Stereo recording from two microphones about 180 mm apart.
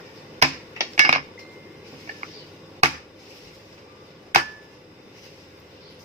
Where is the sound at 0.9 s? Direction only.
40° right (ahead or behind).